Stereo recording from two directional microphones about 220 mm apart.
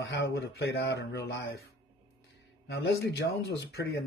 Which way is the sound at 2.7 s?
45° left (ahead or behind).